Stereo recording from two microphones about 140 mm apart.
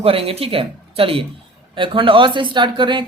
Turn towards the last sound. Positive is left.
turn(degrees=-35)  # may be behind; listen again after turning